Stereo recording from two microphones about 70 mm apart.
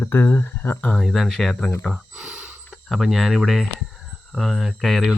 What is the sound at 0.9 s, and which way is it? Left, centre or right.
Speech, centre.